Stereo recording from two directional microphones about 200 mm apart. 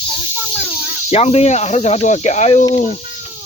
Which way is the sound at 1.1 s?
30° left (ahead or behind).